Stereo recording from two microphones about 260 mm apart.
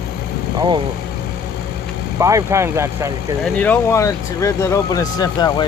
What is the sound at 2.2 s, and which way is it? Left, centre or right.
Speech, centre.